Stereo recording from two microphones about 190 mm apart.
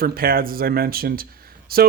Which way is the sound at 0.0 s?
50° right (ahead or behind).